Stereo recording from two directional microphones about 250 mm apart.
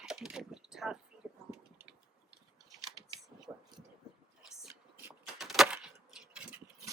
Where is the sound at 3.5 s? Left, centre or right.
Centre.